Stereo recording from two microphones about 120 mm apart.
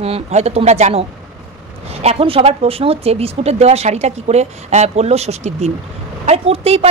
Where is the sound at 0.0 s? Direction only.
60° right (ahead or behind).